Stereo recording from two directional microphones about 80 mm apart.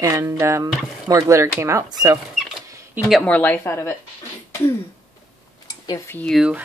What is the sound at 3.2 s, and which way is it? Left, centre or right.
Speech, centre.